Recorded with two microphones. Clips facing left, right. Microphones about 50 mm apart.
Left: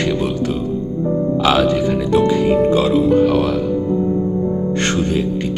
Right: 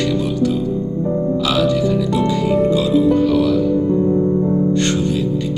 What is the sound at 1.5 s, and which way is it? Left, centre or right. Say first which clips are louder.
Music: left 3 dB; left.